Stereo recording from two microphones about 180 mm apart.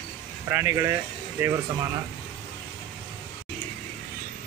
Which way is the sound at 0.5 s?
15° right (ahead or behind).